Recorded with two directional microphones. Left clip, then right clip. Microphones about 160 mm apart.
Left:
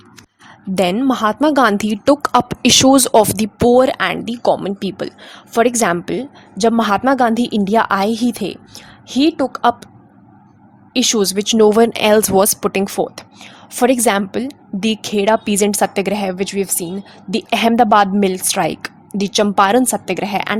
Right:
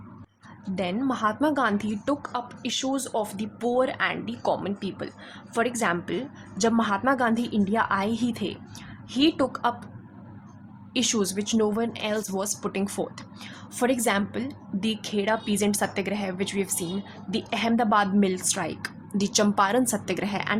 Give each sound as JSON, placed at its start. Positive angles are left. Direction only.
{"t": 0.9, "sound": "a woman's voice", "side_deg": 50}
{"t": 4.4, "sound": "speech", "side_deg": 50}
{"t": 6.8, "sound": "speech", "side_deg": 50}
{"t": 10.9, "sound": "speech", "side_deg": 45}
{"t": 17.3, "sound": "speech", "side_deg": 55}